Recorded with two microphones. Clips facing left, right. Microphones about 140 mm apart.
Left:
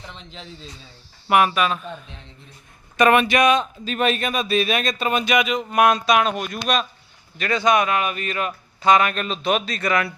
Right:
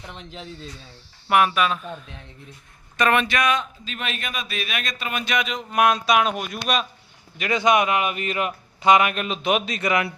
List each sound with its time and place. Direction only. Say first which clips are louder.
0.1 s speech: right 2 dB; 5° right (ahead or behind)
3.0 s speech: left 5 dB; 10° left (ahead or behind)
3.6 s speech: left 9 dB; 40° left (ahead or behind)
5.2 s speech: left 5 dB; 10° left (ahead or behind); by 6.8 s 5° right (ahead or behind)
7.3 s speech: even; 15° right (ahead or behind)